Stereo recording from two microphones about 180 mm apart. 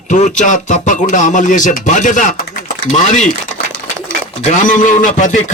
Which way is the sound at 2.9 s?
40° left (ahead or behind).